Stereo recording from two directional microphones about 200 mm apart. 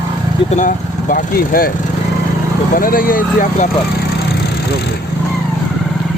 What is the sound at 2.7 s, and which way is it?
Speech, 45° left (ahead or behind).